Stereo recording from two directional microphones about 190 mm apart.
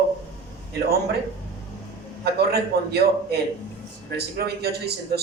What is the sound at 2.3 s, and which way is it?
A man's voice, 55° right (ahead or behind).